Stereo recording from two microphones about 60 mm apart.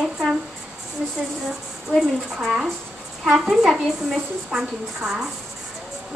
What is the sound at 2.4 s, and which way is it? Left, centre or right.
A woman's voice, centre.